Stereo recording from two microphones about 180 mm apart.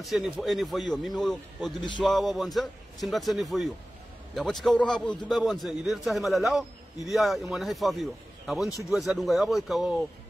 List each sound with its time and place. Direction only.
0.0 s a man's voice: centre (ahead or behind)